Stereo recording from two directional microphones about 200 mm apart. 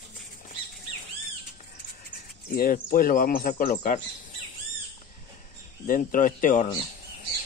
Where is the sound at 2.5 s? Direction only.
45° left (ahead or behind).